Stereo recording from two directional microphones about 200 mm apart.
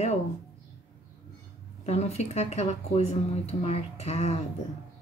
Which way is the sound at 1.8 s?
35° left (ahead or behind).